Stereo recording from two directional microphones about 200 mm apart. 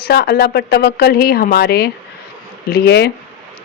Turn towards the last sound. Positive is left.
turn(degrees=55)  # may be behind; listen again after turning